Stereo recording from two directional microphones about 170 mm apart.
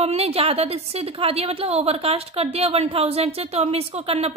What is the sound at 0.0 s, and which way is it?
A woman's voice, 35° right (ahead or behind).